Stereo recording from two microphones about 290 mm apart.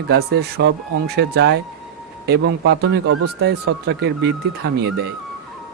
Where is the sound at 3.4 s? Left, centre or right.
Right.